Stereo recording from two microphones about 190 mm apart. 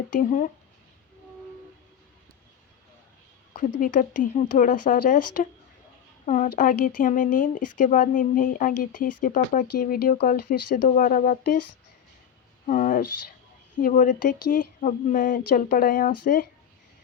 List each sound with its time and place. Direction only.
0.2 s speech: 45° left (ahead or behind)
3.5 s speech: 45° left (ahead or behind)
12.6 s speech: 45° left (ahead or behind)